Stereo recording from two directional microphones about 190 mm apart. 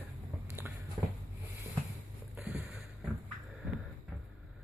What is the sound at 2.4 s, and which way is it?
Boat, 5° right (ahead or behind).